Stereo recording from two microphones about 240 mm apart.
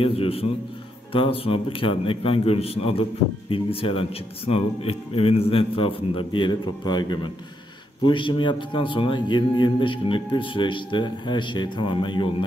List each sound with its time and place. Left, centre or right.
0.0 s a man's voice: left